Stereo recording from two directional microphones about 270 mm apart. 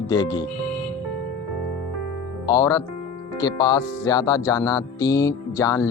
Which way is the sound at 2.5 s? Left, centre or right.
Centre.